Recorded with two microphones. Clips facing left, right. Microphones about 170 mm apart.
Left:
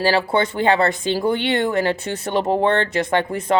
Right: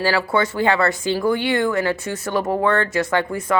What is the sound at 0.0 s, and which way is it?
Speech, 20° left (ahead or behind).